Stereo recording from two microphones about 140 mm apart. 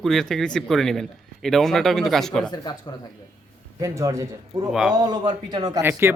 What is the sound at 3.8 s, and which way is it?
Speech, 25° right (ahead or behind).